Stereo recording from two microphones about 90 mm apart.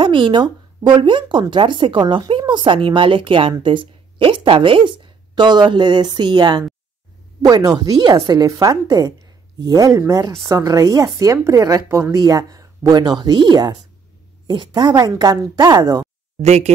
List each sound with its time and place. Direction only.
0.0 s a woman's voice: 65° right (ahead or behind); by 12.2 s 30° right (ahead or behind)
12.2 s speech: 40° right (ahead or behind)
15.8 s speech: 40° right (ahead or behind)